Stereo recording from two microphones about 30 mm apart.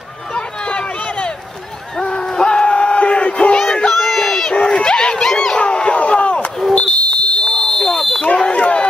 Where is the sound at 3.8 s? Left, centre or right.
Centre.